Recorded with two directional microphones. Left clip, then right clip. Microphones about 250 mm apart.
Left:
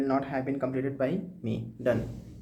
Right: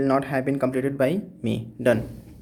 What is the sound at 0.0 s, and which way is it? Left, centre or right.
Speech, right.